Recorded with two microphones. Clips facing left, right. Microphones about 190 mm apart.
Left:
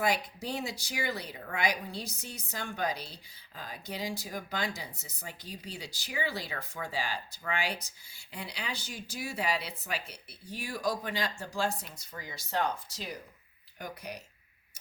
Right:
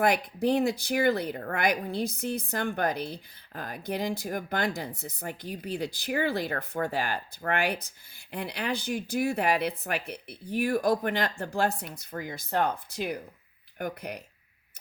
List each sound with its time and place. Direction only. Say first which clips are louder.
0.0 s speech: right 7 dB; 55° right (ahead or behind)